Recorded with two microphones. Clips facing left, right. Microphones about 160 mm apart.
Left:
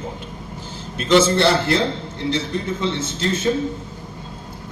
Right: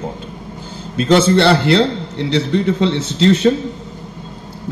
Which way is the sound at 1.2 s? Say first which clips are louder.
Right 5 dB; 70° right (ahead or behind).